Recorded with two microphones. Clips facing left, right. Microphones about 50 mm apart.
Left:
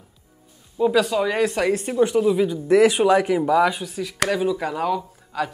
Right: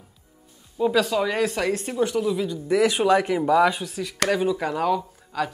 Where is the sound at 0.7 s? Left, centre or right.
Centre.